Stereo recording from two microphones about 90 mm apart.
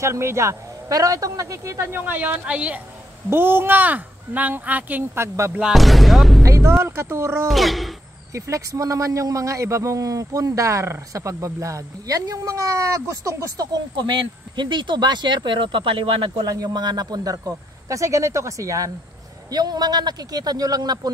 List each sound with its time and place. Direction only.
0.0 s a man's voice: 30° right (ahead or behind); by 2.8 s 15° right (ahead or behind)
3.3 s a woman's voice: 25° right (ahead or behind)
5.5 s speech: 5° right (ahead or behind)
6.4 s a sound: 35° right (ahead or behind)
6.8 s a woman's voice: 30° right (ahead or behind)
7.4 s a sound: centre (ahead or behind)
8.3 s a man's voice: 35° right (ahead or behind)
13.9 s speech: 60° right (ahead or behind)
16.4 s a man's voice: 45° right (ahead or behind)
19.5 s speech: 50° right (ahead or behind)